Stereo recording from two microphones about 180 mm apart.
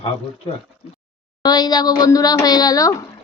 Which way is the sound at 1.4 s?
20° left (ahead or behind).